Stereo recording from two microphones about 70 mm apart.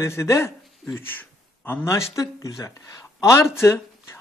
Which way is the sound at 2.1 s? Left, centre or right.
Left.